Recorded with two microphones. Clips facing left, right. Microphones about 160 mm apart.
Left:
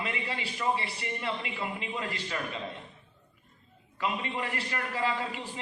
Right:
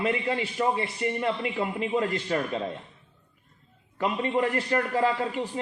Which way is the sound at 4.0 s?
45° right (ahead or behind).